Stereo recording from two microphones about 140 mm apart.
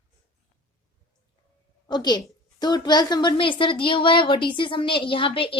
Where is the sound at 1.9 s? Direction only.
30° left (ahead or behind).